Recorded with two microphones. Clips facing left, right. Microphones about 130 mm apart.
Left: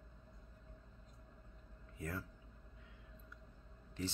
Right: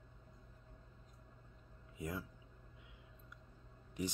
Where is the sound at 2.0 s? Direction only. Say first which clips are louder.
Right 1 dB; 15° right (ahead or behind).